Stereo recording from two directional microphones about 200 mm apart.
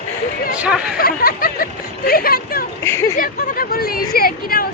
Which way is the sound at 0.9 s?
50° left (ahead or behind).